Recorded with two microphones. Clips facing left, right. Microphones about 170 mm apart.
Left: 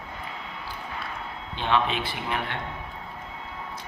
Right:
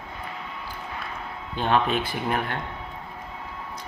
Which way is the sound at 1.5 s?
45° right (ahead or behind).